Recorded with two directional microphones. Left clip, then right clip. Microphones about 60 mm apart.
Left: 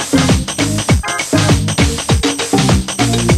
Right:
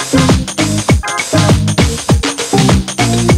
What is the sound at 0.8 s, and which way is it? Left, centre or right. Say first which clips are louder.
Music: right 2 dB; right.